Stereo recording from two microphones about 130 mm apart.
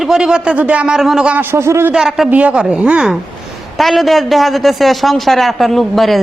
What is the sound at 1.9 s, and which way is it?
A man's voice, centre (ahead or behind).